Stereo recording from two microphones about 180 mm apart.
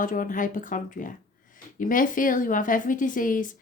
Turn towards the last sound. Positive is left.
turn(degrees=50)  # may be behind; listen again after turning